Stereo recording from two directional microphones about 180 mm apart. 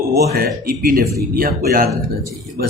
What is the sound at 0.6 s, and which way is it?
A man's voice, 50° right (ahead or behind).